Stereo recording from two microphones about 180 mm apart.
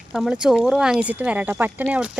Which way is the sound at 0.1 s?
5° right (ahead or behind).